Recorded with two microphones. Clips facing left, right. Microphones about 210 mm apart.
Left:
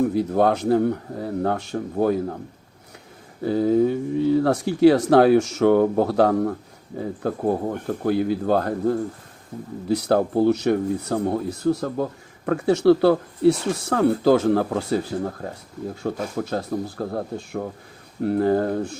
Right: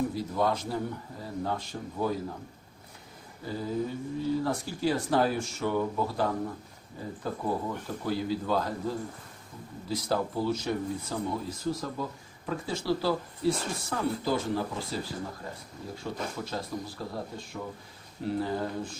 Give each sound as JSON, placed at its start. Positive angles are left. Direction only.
{"t": 0.1, "sound": "a man's voice", "side_deg": 65}
{"t": 3.4, "sound": "a man's voice", "side_deg": 70}
{"t": 16.0, "sound": "a man's voice", "side_deg": 55}